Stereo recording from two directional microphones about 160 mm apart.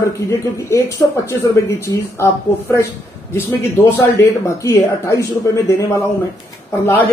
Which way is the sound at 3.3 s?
15° left (ahead or behind).